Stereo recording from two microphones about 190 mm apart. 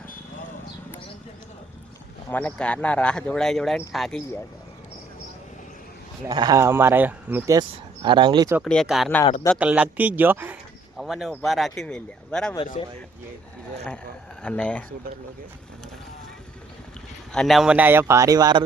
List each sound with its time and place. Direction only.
2.3 s speech: 5° left (ahead or behind)
6.2 s speech: 20° right (ahead or behind)
8.0 s speech: 25° right (ahead or behind)
8.6 s speech: 5° left (ahead or behind)
14.4 s speech: 5° left (ahead or behind)
17.3 s speech: centre (ahead or behind); by 18.6 s 20° right (ahead or behind)